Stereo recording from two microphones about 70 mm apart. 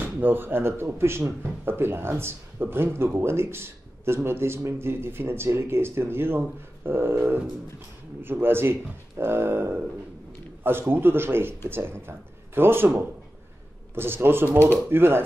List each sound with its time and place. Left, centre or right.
0.0 s speech: right
13.9 s speech: right